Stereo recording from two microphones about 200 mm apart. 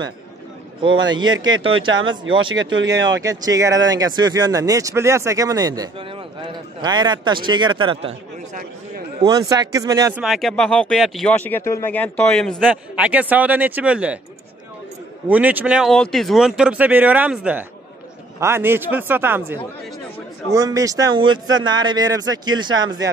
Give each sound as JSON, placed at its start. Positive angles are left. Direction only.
{"t": 1.4, "sound": "speech", "side_deg": -25}
{"t": 2.3, "sound": "speech", "side_deg": -70}
{"t": 2.9, "sound": "speech", "side_deg": -20}
{"t": 9.2, "sound": "a man's voice", "side_deg": -15}
{"t": 10.2, "sound": "speech", "side_deg": 0}
{"t": 15.2, "sound": "a man's voice", "side_deg": -10}